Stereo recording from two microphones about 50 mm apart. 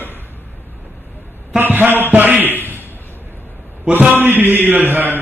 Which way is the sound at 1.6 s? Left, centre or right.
Right.